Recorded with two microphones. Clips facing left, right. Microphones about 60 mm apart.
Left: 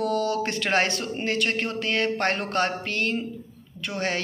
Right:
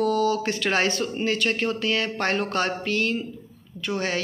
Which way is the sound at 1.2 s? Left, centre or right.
Left.